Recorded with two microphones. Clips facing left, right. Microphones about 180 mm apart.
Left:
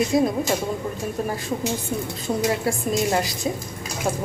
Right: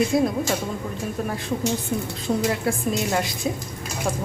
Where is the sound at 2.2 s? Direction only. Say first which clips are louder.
Even; centre (ahead or behind).